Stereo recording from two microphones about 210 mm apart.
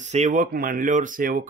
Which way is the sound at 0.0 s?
35° right (ahead or behind).